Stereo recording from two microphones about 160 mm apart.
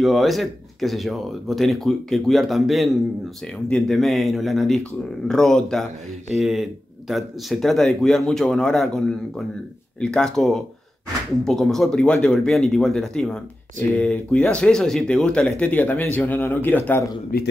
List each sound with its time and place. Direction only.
0.0 s speech: centre (ahead or behind)
17.3 s speech: 60° left (ahead or behind)